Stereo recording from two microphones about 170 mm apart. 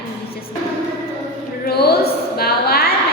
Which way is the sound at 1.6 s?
70° left (ahead or behind).